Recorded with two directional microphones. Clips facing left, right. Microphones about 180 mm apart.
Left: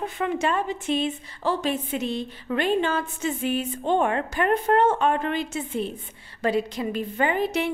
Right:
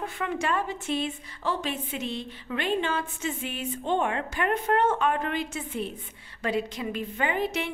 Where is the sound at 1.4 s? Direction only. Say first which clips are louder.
Left 5 dB; 40° left (ahead or behind).